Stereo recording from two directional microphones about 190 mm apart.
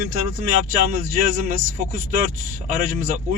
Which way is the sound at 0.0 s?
45° right (ahead or behind).